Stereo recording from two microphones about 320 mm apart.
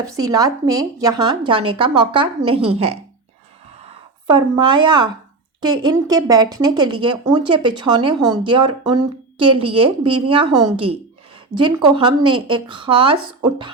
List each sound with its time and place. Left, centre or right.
0.3 s a woman's voice: centre
4.3 s a woman's voice: centre